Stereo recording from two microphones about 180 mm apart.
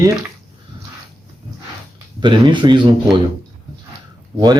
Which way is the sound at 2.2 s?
25° right (ahead or behind).